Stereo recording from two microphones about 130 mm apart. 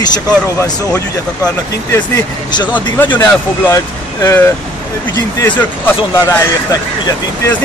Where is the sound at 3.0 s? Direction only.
15° left (ahead or behind).